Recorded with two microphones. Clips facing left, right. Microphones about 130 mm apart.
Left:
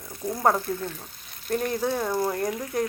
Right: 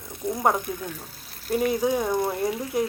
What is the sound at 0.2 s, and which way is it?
Speech, 25° right (ahead or behind).